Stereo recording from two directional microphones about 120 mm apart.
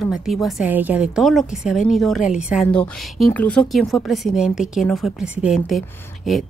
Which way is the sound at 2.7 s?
10° left (ahead or behind).